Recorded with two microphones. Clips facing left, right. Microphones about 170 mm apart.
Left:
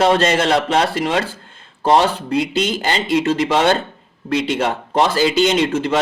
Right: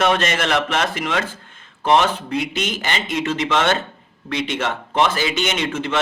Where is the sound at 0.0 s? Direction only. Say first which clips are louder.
Left 4 dB; 30° left (ahead or behind).